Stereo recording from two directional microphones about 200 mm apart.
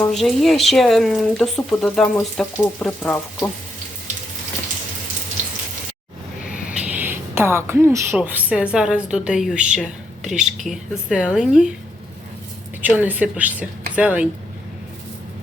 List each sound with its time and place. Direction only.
0.0 s speech: centre (ahead or behind)
6.7 s a woman's voice: 5° right (ahead or behind)
10.3 s a woman's voice: 35° right (ahead or behind)
10.7 s speech: 5° right (ahead or behind)
12.8 s a woman's voice: 10° right (ahead or behind)